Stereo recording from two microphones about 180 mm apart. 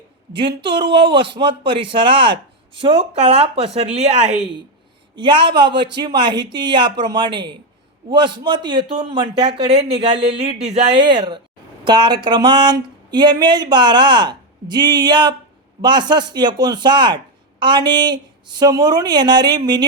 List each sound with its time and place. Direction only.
0.3 s speech: 25° right (ahead or behind)
5.1 s speech: 25° right (ahead or behind)